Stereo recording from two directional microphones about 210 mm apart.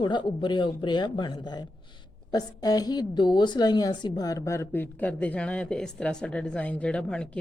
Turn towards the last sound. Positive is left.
turn(degrees=5)  # may be behind; listen again after turning